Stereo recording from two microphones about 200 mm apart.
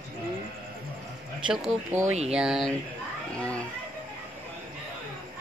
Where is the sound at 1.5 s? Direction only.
5° right (ahead or behind).